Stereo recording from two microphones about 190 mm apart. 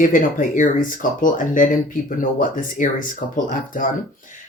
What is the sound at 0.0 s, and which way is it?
Speech, 45° left (ahead or behind).